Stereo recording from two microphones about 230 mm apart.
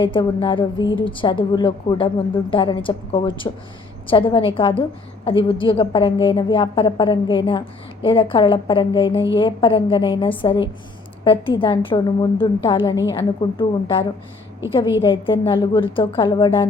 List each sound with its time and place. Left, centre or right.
0.0 s a woman's voice: left